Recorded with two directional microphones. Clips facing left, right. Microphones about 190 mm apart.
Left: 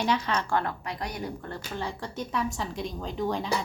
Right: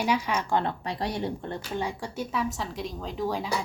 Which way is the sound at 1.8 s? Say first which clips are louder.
Right 2 dB; 10° right (ahead or behind).